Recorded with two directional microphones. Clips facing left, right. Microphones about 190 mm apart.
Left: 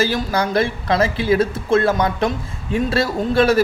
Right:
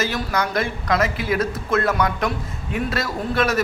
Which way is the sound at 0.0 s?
30° left (ahead or behind).